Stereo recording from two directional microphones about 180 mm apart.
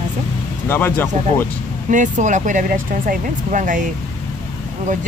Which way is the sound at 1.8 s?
45° right (ahead or behind).